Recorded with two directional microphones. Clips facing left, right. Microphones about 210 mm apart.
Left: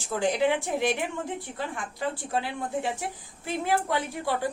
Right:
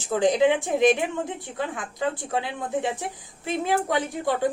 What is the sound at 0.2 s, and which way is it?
Speech, 20° right (ahead or behind).